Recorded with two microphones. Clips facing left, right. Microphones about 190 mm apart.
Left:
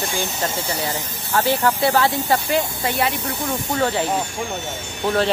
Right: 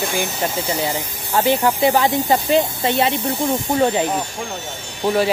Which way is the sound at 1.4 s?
15° right (ahead or behind).